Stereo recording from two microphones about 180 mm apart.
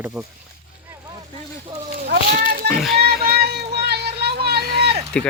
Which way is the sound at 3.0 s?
55° right (ahead or behind).